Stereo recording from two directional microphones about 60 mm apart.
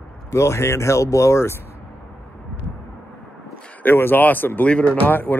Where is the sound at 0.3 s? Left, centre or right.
Left.